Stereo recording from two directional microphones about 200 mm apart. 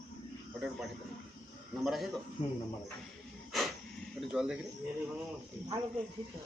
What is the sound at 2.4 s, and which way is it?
Speech, 30° left (ahead or behind).